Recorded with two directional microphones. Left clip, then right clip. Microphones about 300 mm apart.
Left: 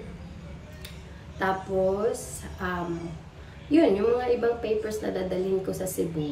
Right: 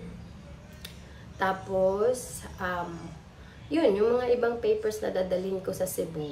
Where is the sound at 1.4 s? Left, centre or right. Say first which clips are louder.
Even; centre.